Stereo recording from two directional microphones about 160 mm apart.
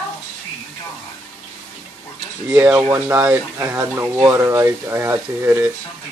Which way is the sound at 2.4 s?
10° right (ahead or behind).